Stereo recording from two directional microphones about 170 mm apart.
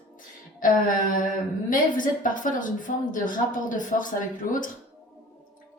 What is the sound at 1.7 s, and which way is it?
A woman's voice, 50° left (ahead or behind).